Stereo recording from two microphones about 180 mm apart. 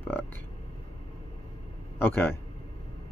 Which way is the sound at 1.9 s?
10° left (ahead or behind).